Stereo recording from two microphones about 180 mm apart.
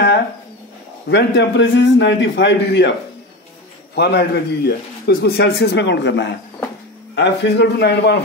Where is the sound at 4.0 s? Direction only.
65° left (ahead or behind).